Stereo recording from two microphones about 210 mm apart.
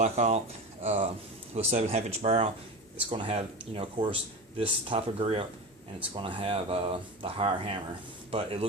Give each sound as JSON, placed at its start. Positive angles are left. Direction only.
{"t": 0.0, "sound": "speech", "side_deg": -35}